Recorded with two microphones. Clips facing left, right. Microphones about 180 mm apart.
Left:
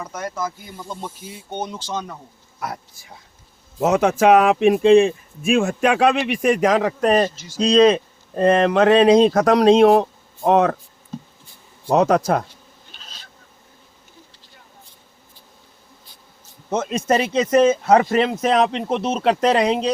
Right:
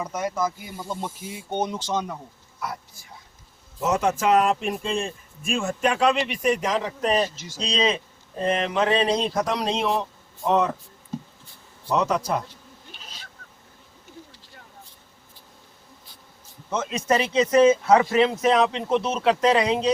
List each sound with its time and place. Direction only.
0.1 s speech: 15° right (ahead or behind)
3.8 s speech: 65° left (ahead or behind); by 8.0 s 45° left (ahead or behind)
8.7 s mantra: 60° left (ahead or behind)
9.0 s speech: 90° left
9.9 s a sound: 55° left (ahead or behind)
11.9 s speech: 80° left
16.6 s speech: 50° left (ahead or behind)